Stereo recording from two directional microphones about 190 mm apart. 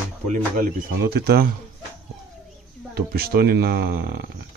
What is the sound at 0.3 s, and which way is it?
Speech, 45° right (ahead or behind).